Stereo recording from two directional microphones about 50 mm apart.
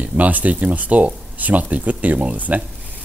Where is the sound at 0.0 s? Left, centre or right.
Right.